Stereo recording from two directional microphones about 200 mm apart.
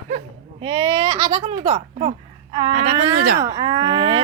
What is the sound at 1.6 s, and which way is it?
Speech, 30° right (ahead or behind).